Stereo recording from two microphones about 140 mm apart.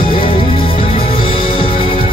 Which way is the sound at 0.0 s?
40° left (ahead or behind).